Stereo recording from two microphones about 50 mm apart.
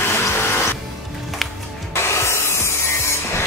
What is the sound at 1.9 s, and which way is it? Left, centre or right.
Rub, left.